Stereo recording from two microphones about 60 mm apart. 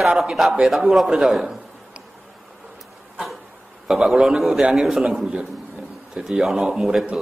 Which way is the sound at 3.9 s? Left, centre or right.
Centre.